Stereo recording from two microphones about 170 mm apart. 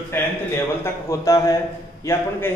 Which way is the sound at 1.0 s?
20° left (ahead or behind).